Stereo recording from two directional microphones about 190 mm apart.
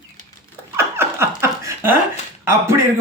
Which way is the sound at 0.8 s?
15° right (ahead or behind).